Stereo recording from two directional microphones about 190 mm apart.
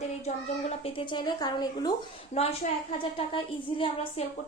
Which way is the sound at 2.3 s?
30° left (ahead or behind).